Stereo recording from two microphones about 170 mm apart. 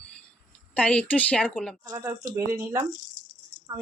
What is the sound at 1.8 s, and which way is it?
Speech, 15° right (ahead or behind).